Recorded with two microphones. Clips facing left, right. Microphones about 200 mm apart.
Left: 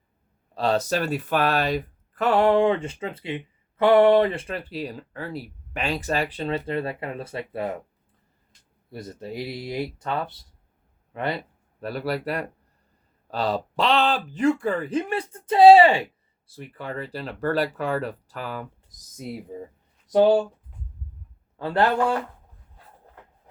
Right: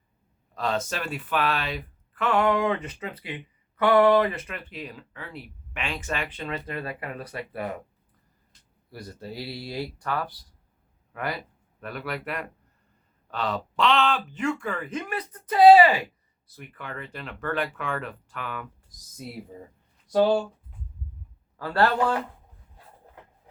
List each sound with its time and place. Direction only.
0.5 s speech: 35° left (ahead or behind)
8.9 s speech: 20° left (ahead or behind)
20.1 s speech: 15° left (ahead or behind)
21.6 s speech: 20° left (ahead or behind)